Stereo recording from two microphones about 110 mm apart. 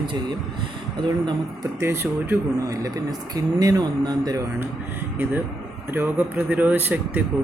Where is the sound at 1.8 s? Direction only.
20° right (ahead or behind); by 4.4 s 35° right (ahead or behind).